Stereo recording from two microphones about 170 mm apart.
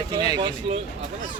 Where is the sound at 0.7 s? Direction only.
35° right (ahead or behind).